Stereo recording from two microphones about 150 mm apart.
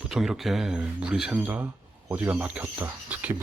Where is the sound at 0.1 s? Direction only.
Centre (ahead or behind).